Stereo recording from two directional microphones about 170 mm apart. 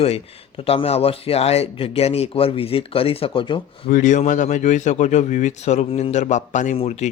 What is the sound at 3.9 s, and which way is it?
A man's voice, 50° left (ahead or behind).